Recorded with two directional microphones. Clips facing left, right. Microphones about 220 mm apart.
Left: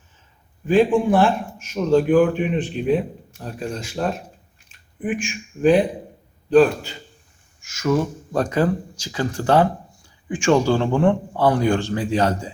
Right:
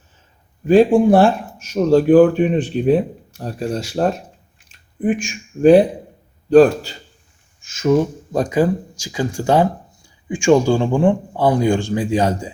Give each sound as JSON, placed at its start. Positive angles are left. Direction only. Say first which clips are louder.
{"t": 0.7, "sound": "speech", "louder": "right 5 dB", "side_deg": -40}
{"t": 7.8, "sound": "speech", "louder": "right 5 dB", "side_deg": -20}